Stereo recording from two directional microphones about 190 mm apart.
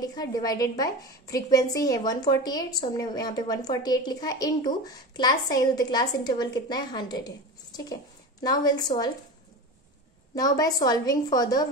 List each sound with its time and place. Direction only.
0.0 s a woman's voice: 20° left (ahead or behind)
10.3 s a woman's voice: 20° left (ahead or behind)